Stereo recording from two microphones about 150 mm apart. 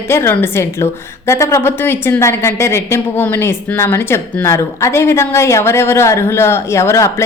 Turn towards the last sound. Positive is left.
turn(degrees=20)  # may be behind; listen again after turning